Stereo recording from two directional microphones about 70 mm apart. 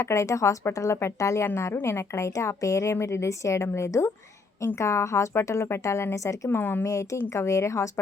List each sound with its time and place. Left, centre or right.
0.0 s a woman's voice: left
6.5 s speech: left
6.8 s a woman's voice: left